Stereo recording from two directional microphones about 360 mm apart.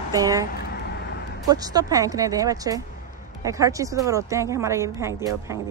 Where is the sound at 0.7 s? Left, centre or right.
Left.